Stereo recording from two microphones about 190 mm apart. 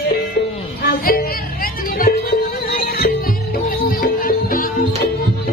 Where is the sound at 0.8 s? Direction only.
50° left (ahead or behind).